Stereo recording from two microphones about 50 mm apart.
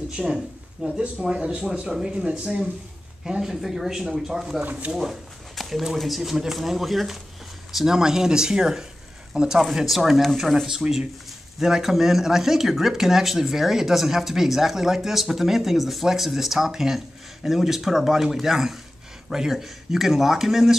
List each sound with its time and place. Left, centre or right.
0.2 s speech: centre
0.8 s speech: right
1.2 s speech: centre
1.5 s speech: right
1.9 s speech: centre
5.6 s a sound: centre
5.9 s speech: centre